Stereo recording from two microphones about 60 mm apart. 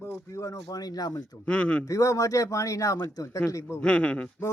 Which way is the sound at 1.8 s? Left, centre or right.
Left.